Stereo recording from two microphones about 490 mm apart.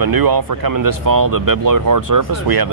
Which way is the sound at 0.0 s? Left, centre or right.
Right.